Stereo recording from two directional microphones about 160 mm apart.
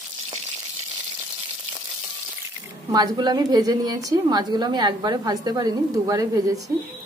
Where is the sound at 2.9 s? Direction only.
25° right (ahead or behind).